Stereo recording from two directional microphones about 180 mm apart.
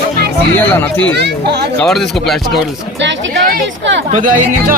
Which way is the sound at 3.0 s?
90° right.